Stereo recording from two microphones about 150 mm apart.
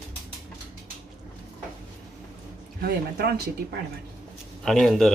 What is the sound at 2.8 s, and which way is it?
Speech, 90° right.